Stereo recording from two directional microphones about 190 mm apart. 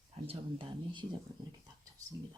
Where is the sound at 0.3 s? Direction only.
30° right (ahead or behind).